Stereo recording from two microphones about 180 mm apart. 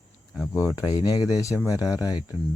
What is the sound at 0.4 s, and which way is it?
Speech, 15° left (ahead or behind).